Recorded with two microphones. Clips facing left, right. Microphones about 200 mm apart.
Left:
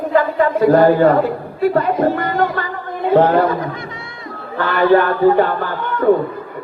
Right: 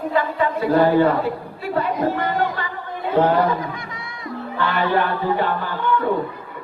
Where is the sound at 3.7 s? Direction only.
25° left (ahead or behind).